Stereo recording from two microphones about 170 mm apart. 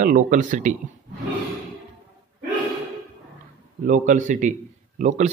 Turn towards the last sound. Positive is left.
turn(degrees=-45)  # may be behind; listen again after turning